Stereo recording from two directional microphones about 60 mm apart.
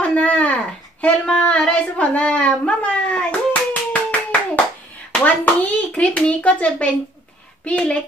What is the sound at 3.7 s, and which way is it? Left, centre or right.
Clapping, left.